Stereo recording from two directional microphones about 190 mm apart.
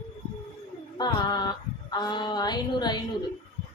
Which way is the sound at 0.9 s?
20° left (ahead or behind).